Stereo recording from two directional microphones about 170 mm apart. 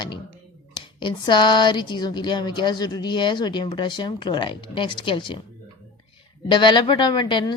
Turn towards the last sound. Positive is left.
turn(degrees=25)  # may be behind; listen again after turning